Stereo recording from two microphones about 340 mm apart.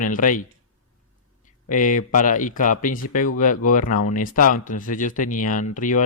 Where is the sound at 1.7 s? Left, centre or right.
Left.